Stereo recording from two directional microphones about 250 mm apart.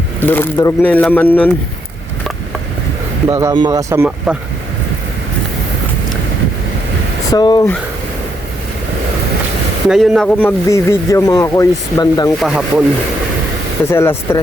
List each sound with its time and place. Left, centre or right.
0.2 s a man's voice: centre
3.2 s speech: centre
7.3 s speech: centre
9.9 s a man's voice: centre
12.4 s speech: centre
13.9 s a man's voice: centre